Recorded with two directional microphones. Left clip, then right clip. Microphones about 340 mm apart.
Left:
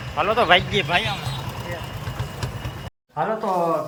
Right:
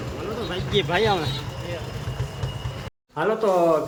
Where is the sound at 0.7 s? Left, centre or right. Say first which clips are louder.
Right 1 dB; centre.